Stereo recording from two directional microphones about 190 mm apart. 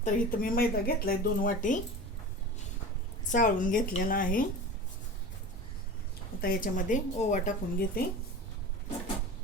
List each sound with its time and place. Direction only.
0.0 s speech: 45° left (ahead or behind)
3.3 s speech: 45° left (ahead or behind)
6.4 s speech: 50° left (ahead or behind)